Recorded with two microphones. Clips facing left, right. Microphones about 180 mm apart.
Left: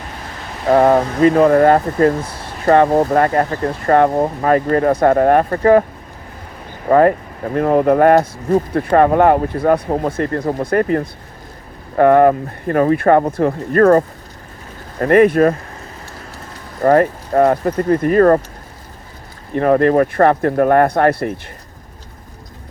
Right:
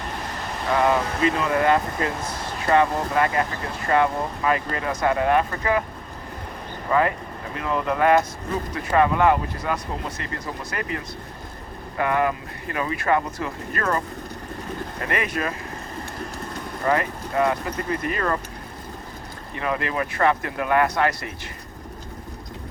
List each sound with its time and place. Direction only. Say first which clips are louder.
0.7 s speech: left 9 dB; 50° left (ahead or behind)
6.8 s speech: left 10 dB; 50° left (ahead or behind)
15.0 s speech: left 17 dB; 50° left (ahead or behind)
16.8 s speech: left 11 dB; 50° left (ahead or behind)
19.5 s speech: left 14 dB; 50° left (ahead or behind)